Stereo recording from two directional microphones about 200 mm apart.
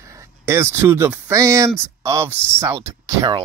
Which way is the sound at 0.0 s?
15° right (ahead or behind).